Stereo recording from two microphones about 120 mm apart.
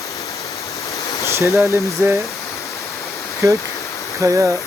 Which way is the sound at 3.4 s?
25° right (ahead or behind).